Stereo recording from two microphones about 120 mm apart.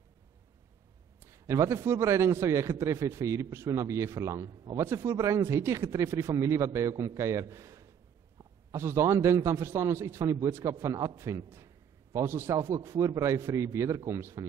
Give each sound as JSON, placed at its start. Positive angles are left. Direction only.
{"t": 1.2, "sound": "a man's voice", "side_deg": -25}